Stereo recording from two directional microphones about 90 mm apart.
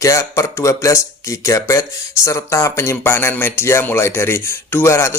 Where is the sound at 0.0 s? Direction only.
35° left (ahead or behind).